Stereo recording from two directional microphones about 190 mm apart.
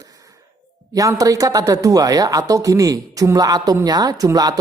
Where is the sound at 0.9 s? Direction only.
20° right (ahead or behind).